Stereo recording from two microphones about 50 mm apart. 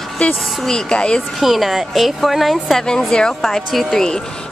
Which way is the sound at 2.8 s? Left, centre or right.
Centre.